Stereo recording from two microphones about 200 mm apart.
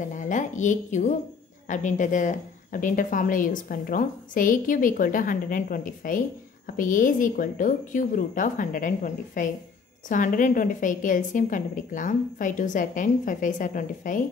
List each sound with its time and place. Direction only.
0.1 s a woman's voice: 40° left (ahead or behind)